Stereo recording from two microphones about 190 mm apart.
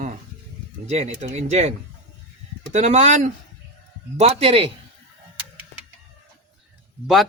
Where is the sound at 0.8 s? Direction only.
35° right (ahead or behind).